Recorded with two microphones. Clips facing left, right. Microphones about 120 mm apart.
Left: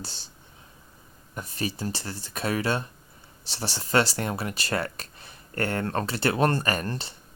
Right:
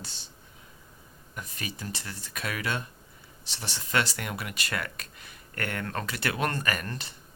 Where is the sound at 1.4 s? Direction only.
30° left (ahead or behind).